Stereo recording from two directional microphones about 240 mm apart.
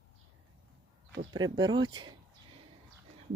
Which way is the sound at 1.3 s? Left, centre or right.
Centre.